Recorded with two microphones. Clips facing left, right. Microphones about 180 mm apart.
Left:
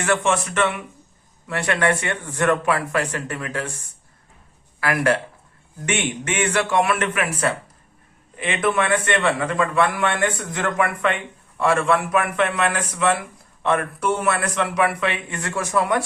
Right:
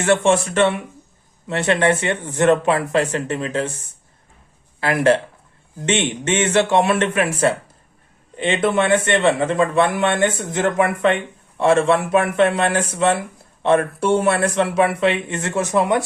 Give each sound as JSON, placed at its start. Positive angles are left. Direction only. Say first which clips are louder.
{"t": 0.0, "sound": "speech", "louder": "right 5 dB", "side_deg": -30}
{"t": 4.8, "sound": "speech", "louder": "right 4 dB", "side_deg": -25}